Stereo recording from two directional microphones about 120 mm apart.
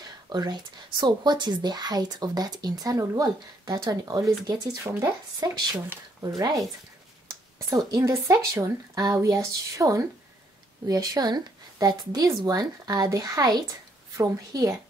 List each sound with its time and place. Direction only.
0.3 s a woman's voice: 35° right (ahead or behind)